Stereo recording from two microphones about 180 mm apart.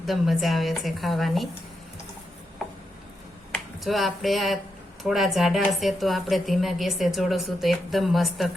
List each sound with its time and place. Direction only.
0.0 s a woman's voice: centre (ahead or behind)
3.5 s a woman's voice: centre (ahead or behind)